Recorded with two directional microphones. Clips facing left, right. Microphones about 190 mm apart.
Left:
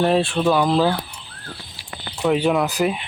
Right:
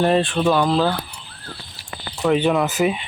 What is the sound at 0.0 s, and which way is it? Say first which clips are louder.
Speech: even; 5° left (ahead or behind).